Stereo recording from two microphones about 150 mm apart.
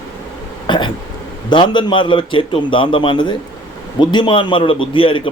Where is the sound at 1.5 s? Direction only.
30° left (ahead or behind).